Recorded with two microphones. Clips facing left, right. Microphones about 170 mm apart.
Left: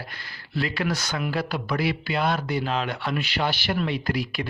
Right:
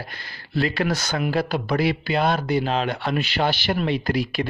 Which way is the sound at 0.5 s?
30° right (ahead or behind).